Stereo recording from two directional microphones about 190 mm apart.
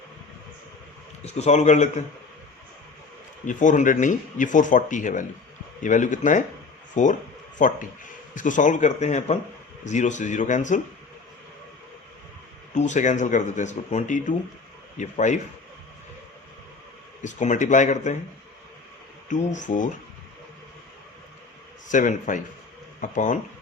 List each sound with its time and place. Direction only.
1.2 s speech: 35° left (ahead or behind)
3.4 s speech: 40° left (ahead or behind)
12.7 s speech: 40° left (ahead or behind)
17.2 s speech: 40° left (ahead or behind)
19.5 s speech: 40° left (ahead or behind)
21.8 s a man's voice: 45° left (ahead or behind)